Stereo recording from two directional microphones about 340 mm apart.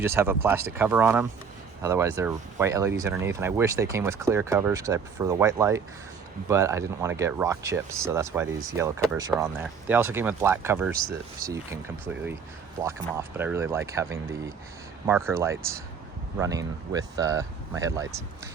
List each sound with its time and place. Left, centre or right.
0.0 s speech: centre
12.8 s speech: centre